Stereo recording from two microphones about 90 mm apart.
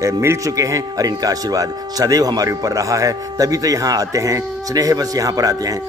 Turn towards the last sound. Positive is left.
turn(degrees=-40)  # may be behind; listen again after turning